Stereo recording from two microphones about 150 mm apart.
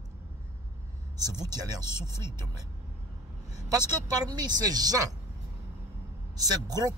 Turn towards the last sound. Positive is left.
turn(degrees=-25)  # may be behind; listen again after turning